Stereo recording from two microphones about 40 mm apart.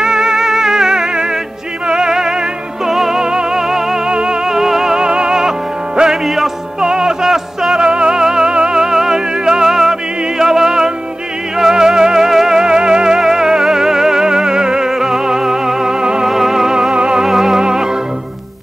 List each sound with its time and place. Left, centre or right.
0.0 s music: centre
6.2 s music: centre
6.8 s music: centre
7.8 s music: right
16.3 s music: centre
16.9 s music: right
17.2 s music: centre
17.6 s music: centre